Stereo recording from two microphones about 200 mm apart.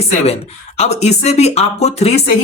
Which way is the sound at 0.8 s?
35° left (ahead or behind).